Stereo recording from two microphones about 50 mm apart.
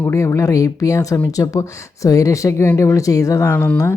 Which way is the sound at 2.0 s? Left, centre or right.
Left.